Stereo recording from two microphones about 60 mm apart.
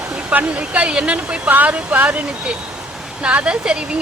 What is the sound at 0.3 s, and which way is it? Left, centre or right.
A woman's voice, right.